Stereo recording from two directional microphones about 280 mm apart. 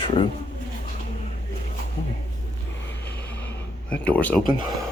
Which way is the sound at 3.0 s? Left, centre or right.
Centre.